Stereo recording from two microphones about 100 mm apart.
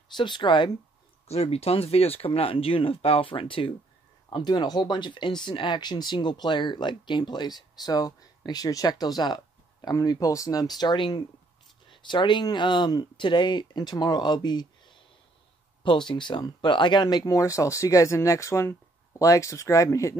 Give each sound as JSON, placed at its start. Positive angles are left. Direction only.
{"t": 0.1, "sound": "speech", "side_deg": 50}
{"t": 1.2, "sound": "speech", "side_deg": 90}
{"t": 4.3, "sound": "speech", "side_deg": 45}